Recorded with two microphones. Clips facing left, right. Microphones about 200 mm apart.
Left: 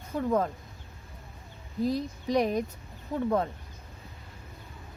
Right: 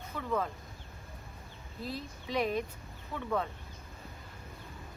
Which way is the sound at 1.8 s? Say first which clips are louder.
Left 11 dB; 45° left (ahead or behind).